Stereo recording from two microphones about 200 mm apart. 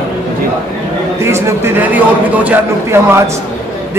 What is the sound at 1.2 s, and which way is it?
A man's voice, 15° right (ahead or behind).